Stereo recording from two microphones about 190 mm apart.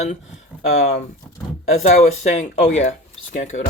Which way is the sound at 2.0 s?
35° left (ahead or behind).